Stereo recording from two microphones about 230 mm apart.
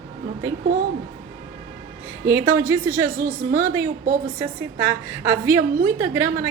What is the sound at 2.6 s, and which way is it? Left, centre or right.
A woman's voice, centre.